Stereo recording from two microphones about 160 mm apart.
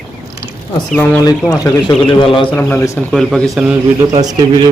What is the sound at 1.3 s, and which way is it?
A man's voice, 20° left (ahead or behind).